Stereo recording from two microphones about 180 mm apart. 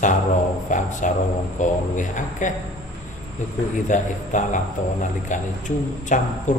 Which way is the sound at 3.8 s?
45° left (ahead or behind).